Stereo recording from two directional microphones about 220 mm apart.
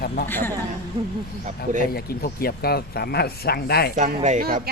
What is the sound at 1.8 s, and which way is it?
Speech, 45° left (ahead or behind).